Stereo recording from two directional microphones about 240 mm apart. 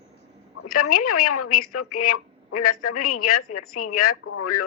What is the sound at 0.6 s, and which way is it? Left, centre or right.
A woman's voice, left.